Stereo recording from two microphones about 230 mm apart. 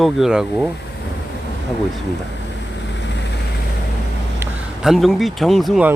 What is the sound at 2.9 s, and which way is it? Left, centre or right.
Vehicle, left.